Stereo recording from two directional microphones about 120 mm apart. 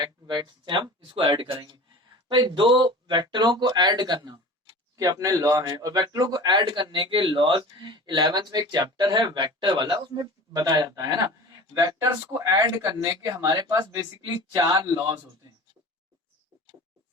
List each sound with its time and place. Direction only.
0.0 s a man's voice: 35° right (ahead or behind)